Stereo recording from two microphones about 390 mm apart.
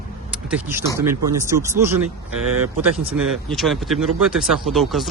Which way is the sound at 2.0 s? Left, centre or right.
Right.